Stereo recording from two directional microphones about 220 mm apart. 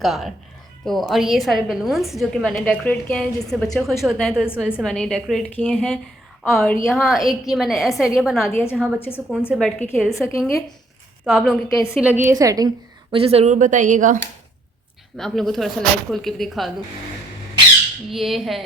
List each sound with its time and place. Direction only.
0.0 s a woman's voice: centre (ahead or behind)
9.0 s a woman's voice: 10° left (ahead or behind); by 14.2 s 35° right (ahead or behind)
15.2 s a woman's voice: centre (ahead or behind)
18.1 s a woman's voice: centre (ahead or behind)